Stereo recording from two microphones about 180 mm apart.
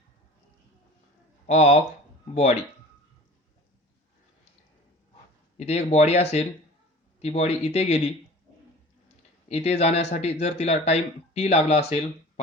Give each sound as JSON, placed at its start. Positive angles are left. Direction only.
{"t": 1.5, "sound": "speech", "side_deg": 35}
{"t": 5.5, "sound": "speech", "side_deg": 35}
{"t": 9.5, "sound": "speech", "side_deg": 35}